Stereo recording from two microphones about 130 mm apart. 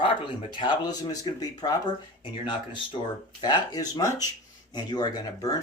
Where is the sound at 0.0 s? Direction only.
40° left (ahead or behind).